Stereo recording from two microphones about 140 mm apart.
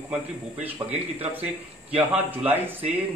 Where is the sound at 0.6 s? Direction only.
45° right (ahead or behind).